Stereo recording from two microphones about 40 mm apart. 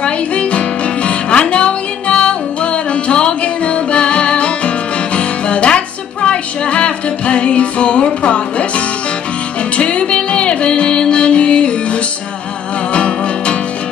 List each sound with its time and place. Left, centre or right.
0.0 s music: left